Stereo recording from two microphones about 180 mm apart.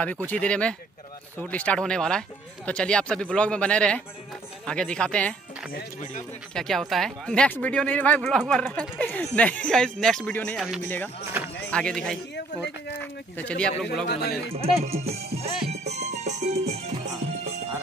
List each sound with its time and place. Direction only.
0.3 s speech: 5° left (ahead or behind)
6.5 s speech: centre (ahead or behind)
10.8 s speech: 10° left (ahead or behind)
11.4 s a sound: 10° right (ahead or behind)
11.7 s speech: 5° left (ahead or behind)
13.0 s a sound: 10° left (ahead or behind)
14.0 s speech: 65° left (ahead or behind)
14.5 s music: 35° right (ahead or behind)